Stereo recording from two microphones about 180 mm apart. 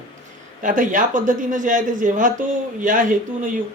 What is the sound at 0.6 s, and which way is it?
Speech, 45° right (ahead or behind).